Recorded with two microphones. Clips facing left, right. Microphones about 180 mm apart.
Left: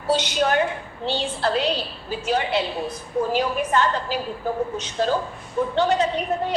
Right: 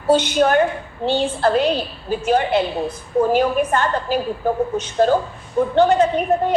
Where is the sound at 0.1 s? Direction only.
50° right (ahead or behind).